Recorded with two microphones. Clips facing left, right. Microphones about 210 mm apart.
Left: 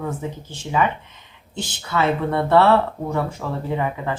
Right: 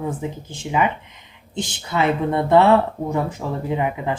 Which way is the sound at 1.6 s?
20° right (ahead or behind).